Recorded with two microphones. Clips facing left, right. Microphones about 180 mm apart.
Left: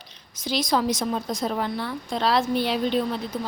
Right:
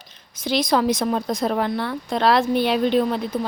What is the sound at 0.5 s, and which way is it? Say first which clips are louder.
A woman's voice: right 4 dB; 65° right (ahead or behind).